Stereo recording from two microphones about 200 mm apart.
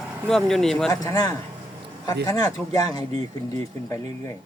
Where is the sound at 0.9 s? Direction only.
20° left (ahead or behind).